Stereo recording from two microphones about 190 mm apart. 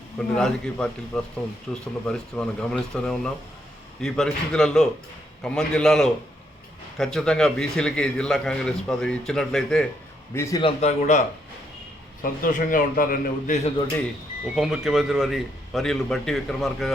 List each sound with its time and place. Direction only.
0.2 s a man's voice: 5° left (ahead or behind)
10.3 s a man's voice: 15° left (ahead or behind)
10.6 s a man's voice: 35° left (ahead or behind)
12.2 s a man's voice: 45° left (ahead or behind)
14.4 s a man's voice: 5° right (ahead or behind)